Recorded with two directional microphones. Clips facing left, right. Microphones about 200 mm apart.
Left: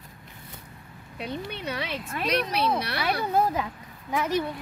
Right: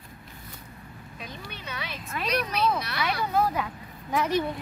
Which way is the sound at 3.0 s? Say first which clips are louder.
Left 1 dB; 30° left (ahead or behind).